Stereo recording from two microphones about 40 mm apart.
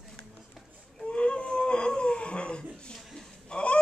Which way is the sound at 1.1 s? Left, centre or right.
Left.